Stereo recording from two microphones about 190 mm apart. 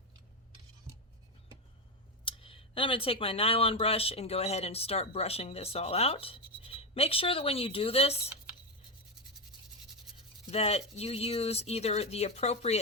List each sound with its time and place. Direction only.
2.2 s speech: 30° left (ahead or behind)
10.4 s speech: 35° left (ahead or behind)